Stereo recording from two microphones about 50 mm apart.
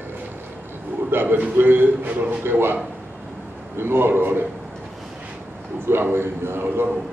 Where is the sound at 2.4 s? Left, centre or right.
Right.